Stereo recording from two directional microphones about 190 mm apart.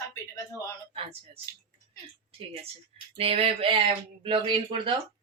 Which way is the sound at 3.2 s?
30° right (ahead or behind).